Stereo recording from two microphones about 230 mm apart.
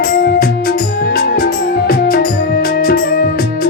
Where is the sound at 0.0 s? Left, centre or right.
Left.